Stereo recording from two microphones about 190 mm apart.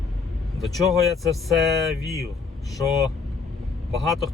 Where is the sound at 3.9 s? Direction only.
Centre (ahead or behind).